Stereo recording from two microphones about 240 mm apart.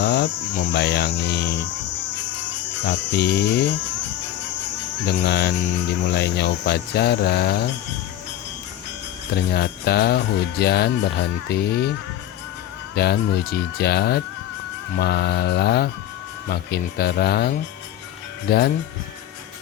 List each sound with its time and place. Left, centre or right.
0.0 s a sound: left
0.5 s speech: left
2.8 s speech: left
5.0 s speech: left
9.3 s speech: left
13.0 s speech: left